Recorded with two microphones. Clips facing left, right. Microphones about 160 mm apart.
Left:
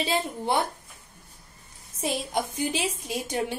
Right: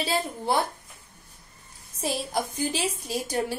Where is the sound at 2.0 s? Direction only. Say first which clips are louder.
Even; 35° right (ahead or behind).